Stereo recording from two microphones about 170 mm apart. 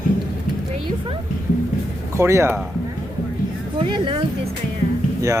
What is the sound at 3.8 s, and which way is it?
Speech, 30° right (ahead or behind).